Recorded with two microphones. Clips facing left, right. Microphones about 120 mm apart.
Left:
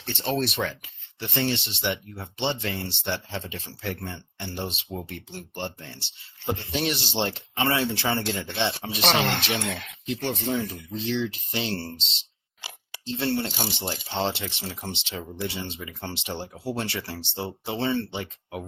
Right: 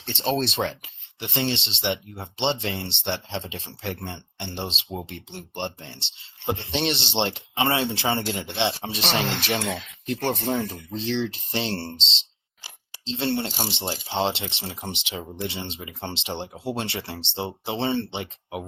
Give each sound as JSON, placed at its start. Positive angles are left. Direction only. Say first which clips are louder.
{"t": 0.0, "sound": "speech", "louder": "right 2 dB", "side_deg": -25}
{"t": 9.0, "sound": "speech", "louder": "left 4 dB", "side_deg": 65}
{"t": 9.4, "sound": "speech", "louder": "right 2 dB", "side_deg": -60}
{"t": 12.6, "sound": "a sound", "louder": "left 5 dB", "side_deg": 65}
{"t": 13.1, "sound": "speech", "louder": "right 1 dB", "side_deg": -25}